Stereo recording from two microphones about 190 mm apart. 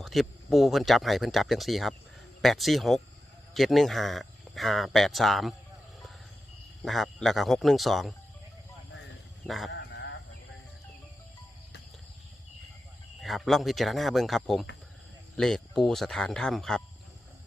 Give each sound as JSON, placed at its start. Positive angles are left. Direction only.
{"t": 0.0, "sound": "speech", "side_deg": 0}
{"t": 6.8, "sound": "speech", "side_deg": 0}
{"t": 9.5, "sound": "speech", "side_deg": 0}
{"t": 9.7, "sound": "bird", "side_deg": 65}
{"t": 13.2, "sound": "speech", "side_deg": 0}